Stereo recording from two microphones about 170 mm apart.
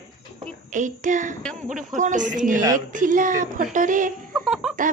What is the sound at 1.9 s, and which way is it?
A woman's voice, 45° right (ahead or behind).